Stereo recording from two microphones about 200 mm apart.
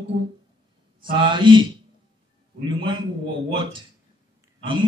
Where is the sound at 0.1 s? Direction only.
25° right (ahead or behind).